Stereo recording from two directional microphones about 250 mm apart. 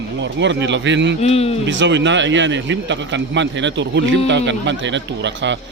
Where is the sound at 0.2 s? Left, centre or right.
Right.